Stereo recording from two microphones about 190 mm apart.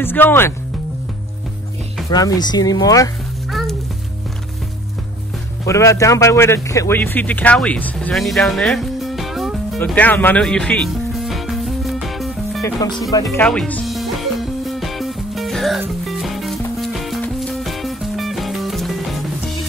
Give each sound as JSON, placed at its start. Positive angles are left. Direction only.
{"t": 0.0, "sound": "speech", "side_deg": 10}
{"t": 2.0, "sound": "speech", "side_deg": 20}
{"t": 5.7, "sound": "speech", "side_deg": 15}
{"t": 9.8, "sound": "music", "side_deg": 10}
{"t": 13.1, "sound": "speech", "side_deg": 15}
{"t": 13.5, "sound": "music", "side_deg": 5}